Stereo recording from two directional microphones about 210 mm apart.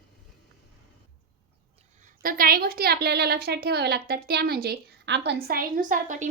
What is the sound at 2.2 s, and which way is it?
A woman's voice, 45° right (ahead or behind).